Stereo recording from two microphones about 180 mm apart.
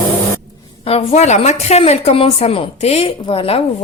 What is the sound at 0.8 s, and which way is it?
A woman's voice, 35° left (ahead or behind).